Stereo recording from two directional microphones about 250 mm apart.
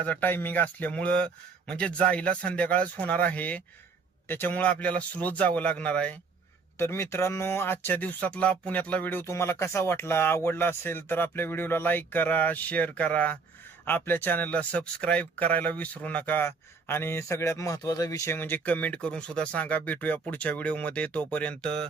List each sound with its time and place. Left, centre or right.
0.0 s speech: centre